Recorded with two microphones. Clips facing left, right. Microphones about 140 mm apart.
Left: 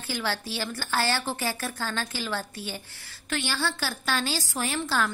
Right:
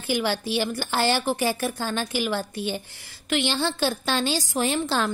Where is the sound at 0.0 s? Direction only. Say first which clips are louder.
Right 6 dB; 15° right (ahead or behind).